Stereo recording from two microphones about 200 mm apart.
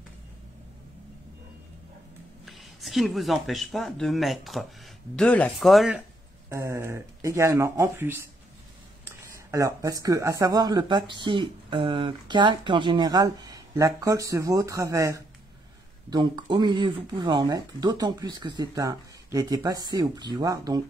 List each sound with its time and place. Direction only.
2.4 s speech: centre (ahead or behind)
6.5 s speech: 15° right (ahead or behind)